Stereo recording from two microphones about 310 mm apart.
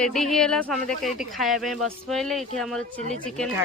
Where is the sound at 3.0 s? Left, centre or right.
Right.